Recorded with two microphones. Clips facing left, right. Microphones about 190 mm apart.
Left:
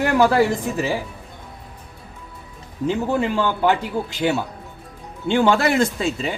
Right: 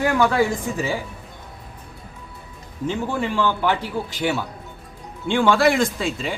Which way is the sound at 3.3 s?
20° left (ahead or behind).